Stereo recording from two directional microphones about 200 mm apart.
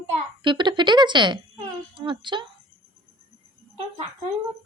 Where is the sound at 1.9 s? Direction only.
25° right (ahead or behind).